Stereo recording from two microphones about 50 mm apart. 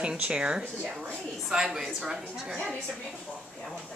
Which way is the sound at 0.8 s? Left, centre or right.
Centre.